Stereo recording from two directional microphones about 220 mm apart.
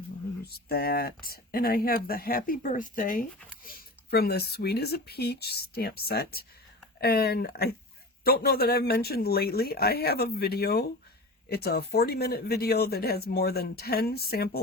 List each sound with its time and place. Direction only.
0.4 s speech: 45° left (ahead or behind)